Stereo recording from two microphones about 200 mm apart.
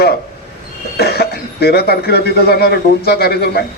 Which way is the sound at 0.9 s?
50° left (ahead or behind).